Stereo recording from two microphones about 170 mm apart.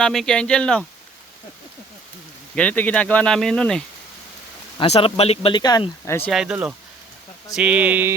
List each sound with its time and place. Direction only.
0.0 s speech: centre (ahead or behind)
2.6 s speech: 10° left (ahead or behind)
4.8 s speech: 35° left (ahead or behind)
6.3 s speech: 5° right (ahead or behind)